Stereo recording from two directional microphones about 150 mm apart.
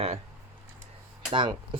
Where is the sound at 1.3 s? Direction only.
35° right (ahead or behind).